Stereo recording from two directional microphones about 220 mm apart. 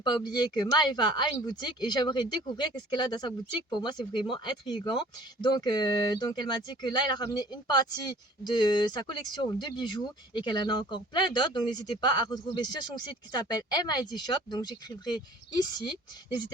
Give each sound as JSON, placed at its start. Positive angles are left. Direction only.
{"t": 0.0, "sound": "speech", "side_deg": 20}